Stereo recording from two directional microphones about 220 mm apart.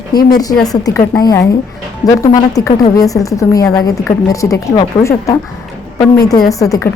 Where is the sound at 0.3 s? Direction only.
15° left (ahead or behind).